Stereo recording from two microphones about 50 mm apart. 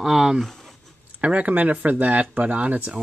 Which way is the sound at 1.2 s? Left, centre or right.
Right.